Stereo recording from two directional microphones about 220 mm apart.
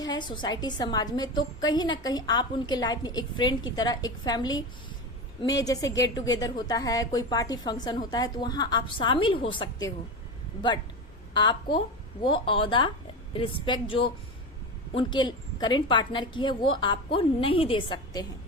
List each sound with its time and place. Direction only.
0.0 s a sound: 20° left (ahead or behind)
0.4 s a woman's voice: 20° left (ahead or behind)
11.3 s a woman's voice: 20° left (ahead or behind)